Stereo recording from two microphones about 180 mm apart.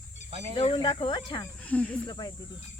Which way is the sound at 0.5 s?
30° left (ahead or behind).